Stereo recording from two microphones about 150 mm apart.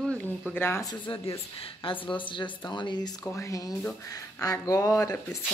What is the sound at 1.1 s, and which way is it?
Speech, 35° left (ahead or behind).